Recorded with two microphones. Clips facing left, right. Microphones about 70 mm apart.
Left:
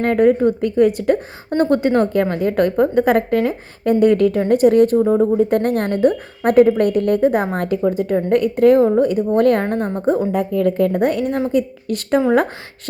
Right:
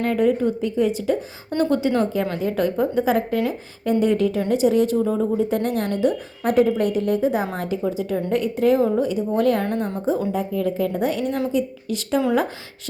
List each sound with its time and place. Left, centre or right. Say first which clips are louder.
0.0 s a woman's voice: left 5 dB; left
5.4 s a woman's voice: left 5 dB; left
9.6 s a woman's voice: left 4 dB; left
10.3 s a woman's voice: left 6 dB; left
11.5 s a woman's voice: left 4 dB; left